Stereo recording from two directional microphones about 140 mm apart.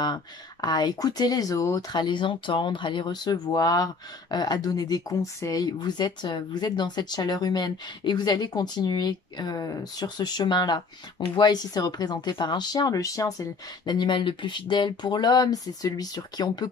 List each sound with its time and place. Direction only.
0.0 s speech: 30° left (ahead or behind)